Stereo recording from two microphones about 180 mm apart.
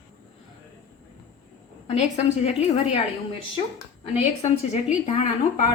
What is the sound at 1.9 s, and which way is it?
A woman's voice, 35° left (ahead or behind).